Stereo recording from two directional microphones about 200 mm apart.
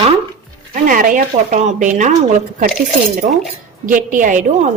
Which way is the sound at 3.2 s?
35° right (ahead or behind).